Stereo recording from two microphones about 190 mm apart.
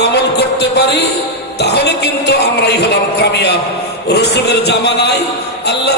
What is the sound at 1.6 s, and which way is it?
Speech, 60° left (ahead or behind).